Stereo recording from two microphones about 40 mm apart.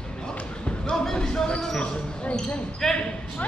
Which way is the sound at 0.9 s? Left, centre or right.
Centre.